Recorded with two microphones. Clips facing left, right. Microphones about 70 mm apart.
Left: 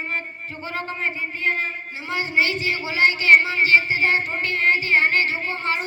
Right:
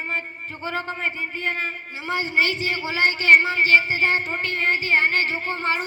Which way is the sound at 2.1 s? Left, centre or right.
Right.